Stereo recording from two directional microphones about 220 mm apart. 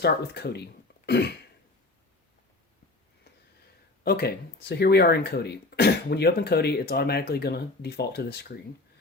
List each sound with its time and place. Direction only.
0.0 s speech: 50° left (ahead or behind)
4.0 s speech: 45° left (ahead or behind)